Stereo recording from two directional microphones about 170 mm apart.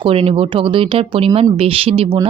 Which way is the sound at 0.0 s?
35° right (ahead or behind).